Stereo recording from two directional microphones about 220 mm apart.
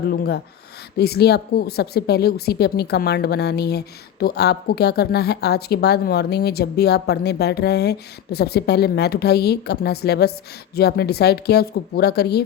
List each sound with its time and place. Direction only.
0.1 s a woman's voice: 45° left (ahead or behind)